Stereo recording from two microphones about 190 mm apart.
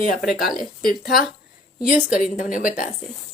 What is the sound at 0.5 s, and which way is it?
Speech, 50° left (ahead or behind).